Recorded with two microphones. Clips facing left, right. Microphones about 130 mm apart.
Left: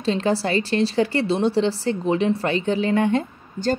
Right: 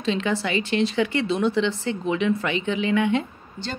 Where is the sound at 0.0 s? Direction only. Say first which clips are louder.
Left 3 dB; 35° left (ahead or behind).